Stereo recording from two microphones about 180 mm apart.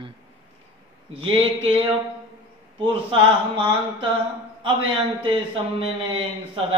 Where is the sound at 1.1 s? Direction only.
30° right (ahead or behind).